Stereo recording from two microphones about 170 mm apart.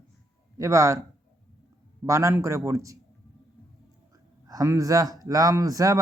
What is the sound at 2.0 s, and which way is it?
Speech, 20° right (ahead or behind).